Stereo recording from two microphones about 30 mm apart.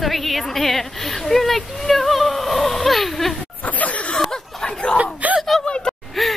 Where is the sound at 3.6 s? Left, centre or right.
Left.